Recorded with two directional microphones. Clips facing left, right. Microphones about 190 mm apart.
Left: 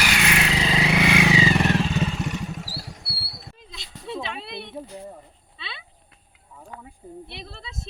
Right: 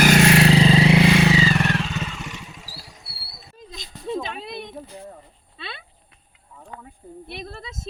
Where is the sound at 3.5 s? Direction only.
40° right (ahead or behind).